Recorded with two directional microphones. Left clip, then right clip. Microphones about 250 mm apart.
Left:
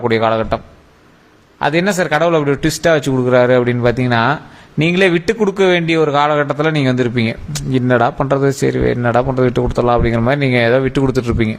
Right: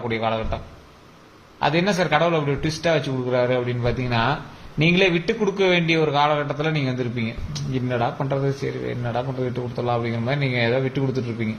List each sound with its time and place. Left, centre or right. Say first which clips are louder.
0.1 s speech: left 8 dB; left